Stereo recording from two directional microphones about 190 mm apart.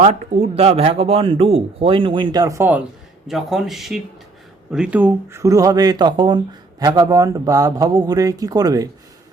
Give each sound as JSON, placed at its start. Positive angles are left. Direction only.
{"t": 0.0, "sound": "speech", "side_deg": -35}